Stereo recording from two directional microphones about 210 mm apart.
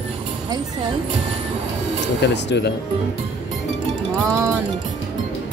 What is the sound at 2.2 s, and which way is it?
Speech, 55° left (ahead or behind).